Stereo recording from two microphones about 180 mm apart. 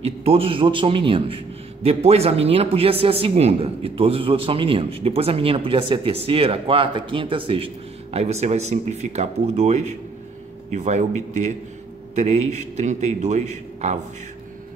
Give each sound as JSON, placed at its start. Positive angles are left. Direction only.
{"t": 0.0, "sound": "a man's voice", "side_deg": -35}